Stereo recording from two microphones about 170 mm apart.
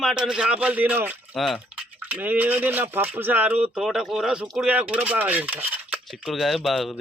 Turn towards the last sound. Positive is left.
turn(degrees=0)  # may be behind; listen again after turning